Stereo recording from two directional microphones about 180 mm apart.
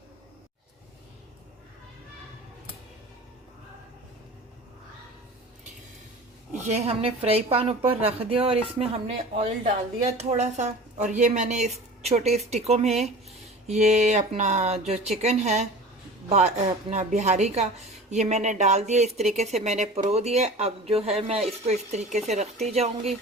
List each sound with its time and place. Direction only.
6.5 s a woman's voice: 40° right (ahead or behind)
16.9 s a woman's voice: 40° right (ahead or behind)